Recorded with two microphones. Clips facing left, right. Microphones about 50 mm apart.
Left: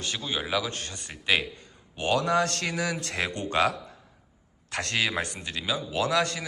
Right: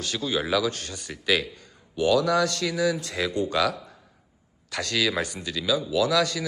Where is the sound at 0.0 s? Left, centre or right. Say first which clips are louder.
Right 4 dB; left.